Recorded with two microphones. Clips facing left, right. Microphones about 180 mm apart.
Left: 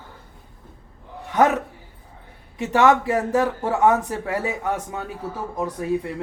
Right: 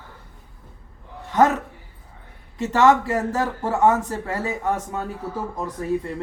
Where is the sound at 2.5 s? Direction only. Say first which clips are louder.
Even; 15° left (ahead or behind).